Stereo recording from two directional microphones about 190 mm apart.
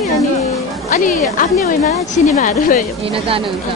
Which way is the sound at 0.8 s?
45° left (ahead or behind).